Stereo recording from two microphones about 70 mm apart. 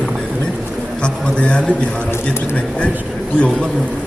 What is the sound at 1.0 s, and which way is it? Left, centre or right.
Speech, centre.